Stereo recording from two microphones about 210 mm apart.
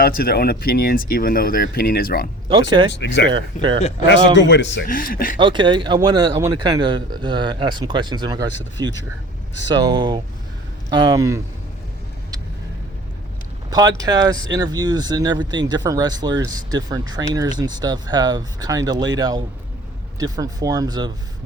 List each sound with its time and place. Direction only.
0.0 s speech: 45° left (ahead or behind)
2.5 s speech: 25° right (ahead or behind)
2.9 s a man's voice: 55° left (ahead or behind)
3.3 s speech: 25° right (ahead or behind)
4.4 s a man's voice: 60° left (ahead or behind)
4.9 s speech: 40° left (ahead or behind)
5.4 s speech: 25° right (ahead or behind)
13.7 s speech: 20° right (ahead or behind)